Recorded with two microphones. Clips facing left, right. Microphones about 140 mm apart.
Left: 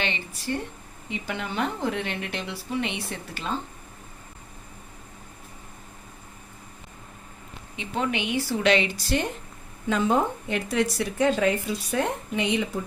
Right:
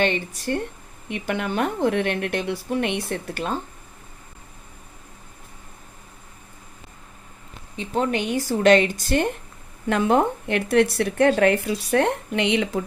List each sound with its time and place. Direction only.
0.0 s speech: 50° right (ahead or behind)
7.8 s speech: 40° right (ahead or behind)
9.9 s speech: 65° right (ahead or behind)